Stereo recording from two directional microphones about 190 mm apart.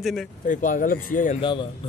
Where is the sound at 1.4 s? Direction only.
25° left (ahead or behind).